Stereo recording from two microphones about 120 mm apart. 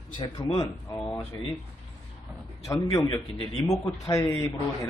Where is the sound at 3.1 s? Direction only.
35° left (ahead or behind).